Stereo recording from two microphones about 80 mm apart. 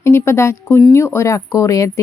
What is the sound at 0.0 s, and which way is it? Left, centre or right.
Speech, left.